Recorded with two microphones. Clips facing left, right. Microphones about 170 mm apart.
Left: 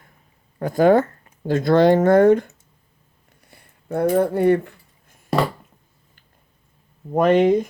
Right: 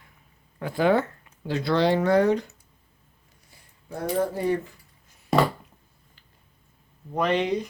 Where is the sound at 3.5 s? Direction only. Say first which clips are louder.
Left 11 dB; 60° left (ahead or behind).